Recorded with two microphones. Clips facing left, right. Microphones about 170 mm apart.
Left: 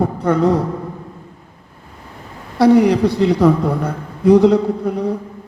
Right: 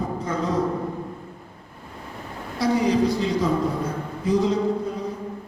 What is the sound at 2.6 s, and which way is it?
A man's voice, 65° left (ahead or behind).